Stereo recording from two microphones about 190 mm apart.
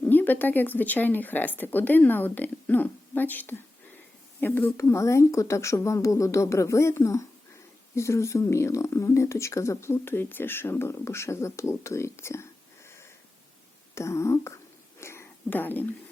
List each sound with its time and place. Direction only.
0.0 s speech: 10° left (ahead or behind)
13.9 s whispering: 15° left (ahead or behind)